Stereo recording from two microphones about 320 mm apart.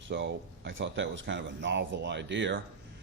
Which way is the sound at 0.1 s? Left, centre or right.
Right.